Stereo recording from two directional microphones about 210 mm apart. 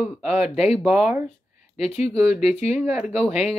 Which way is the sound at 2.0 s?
30° left (ahead or behind).